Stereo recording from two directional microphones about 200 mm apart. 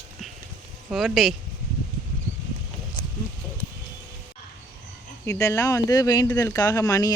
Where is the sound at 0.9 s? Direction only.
Centre (ahead or behind).